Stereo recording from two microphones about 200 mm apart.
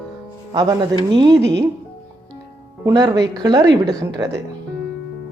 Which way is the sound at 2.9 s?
20° right (ahead or behind).